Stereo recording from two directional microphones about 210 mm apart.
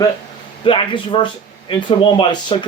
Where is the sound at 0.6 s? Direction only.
25° left (ahead or behind).